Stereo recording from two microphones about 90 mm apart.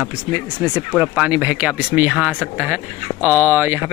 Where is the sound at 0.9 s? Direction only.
5° right (ahead or behind).